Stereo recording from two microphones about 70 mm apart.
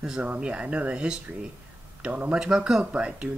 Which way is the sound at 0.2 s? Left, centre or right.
Centre.